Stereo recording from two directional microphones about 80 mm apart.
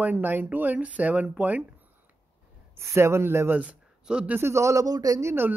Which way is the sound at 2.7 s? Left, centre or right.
Right.